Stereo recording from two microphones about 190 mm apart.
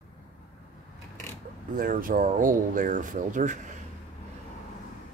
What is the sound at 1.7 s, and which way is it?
Speech, 45° right (ahead or behind).